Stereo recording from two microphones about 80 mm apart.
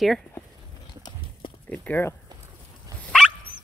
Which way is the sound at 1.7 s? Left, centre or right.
Left.